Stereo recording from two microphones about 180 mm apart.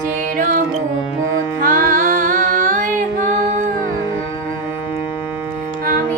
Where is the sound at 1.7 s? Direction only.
45° right (ahead or behind).